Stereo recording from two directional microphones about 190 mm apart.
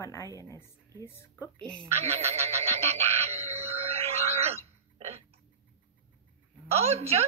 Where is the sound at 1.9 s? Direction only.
35° right (ahead or behind).